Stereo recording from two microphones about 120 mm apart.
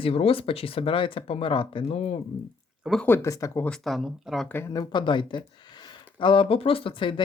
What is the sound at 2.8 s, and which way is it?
Speech, centre (ahead or behind).